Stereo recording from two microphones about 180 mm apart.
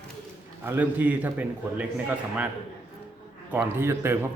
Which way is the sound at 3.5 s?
10° right (ahead or behind).